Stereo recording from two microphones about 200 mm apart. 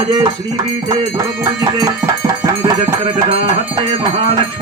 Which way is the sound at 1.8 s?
15° right (ahead or behind).